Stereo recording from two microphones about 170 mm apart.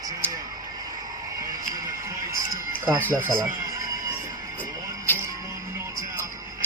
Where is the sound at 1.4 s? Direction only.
20° right (ahead or behind).